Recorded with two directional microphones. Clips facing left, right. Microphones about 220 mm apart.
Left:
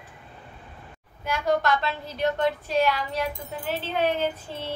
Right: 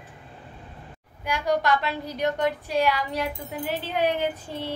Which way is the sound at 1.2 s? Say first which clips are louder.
Even; 15° right (ahead or behind).